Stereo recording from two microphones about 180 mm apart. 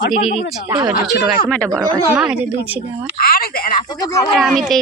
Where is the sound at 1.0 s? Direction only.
Centre (ahead or behind).